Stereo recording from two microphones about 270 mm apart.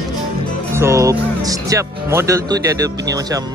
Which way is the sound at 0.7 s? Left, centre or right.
Centre.